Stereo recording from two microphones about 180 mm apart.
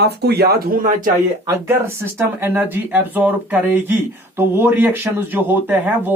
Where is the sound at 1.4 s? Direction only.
15° right (ahead or behind).